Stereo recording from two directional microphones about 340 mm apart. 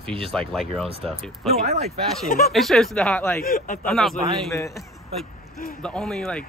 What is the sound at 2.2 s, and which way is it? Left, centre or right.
Speech, left.